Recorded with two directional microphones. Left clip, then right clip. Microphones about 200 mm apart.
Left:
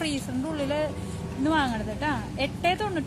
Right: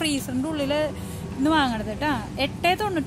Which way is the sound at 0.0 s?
20° right (ahead or behind).